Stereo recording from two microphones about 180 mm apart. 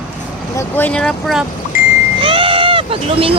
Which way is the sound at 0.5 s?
10° left (ahead or behind).